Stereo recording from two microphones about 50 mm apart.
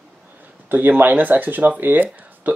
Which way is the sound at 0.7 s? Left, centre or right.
Right.